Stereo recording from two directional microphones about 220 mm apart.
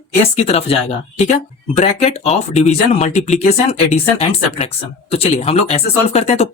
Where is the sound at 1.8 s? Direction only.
30° left (ahead or behind).